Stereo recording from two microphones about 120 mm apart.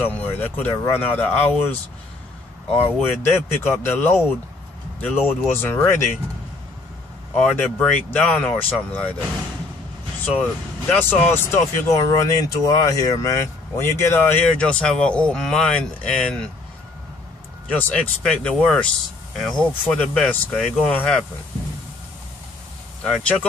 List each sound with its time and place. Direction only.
0.0 s speech: 15° left (ahead or behind)
3.0 s speech: 20° left (ahead or behind)
7.3 s speech: 10° left (ahead or behind)
10.2 s speech: 15° left (ahead or behind)
14.6 s speech: 10° left (ahead or behind)
17.6 s speech: 15° left (ahead or behind)
23.0 s speech: 5° left (ahead or behind)